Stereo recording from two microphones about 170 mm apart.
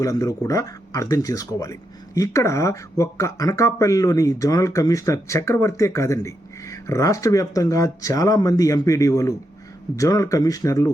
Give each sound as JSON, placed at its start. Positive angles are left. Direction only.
{"t": 0.0, "sound": "speech", "side_deg": 20}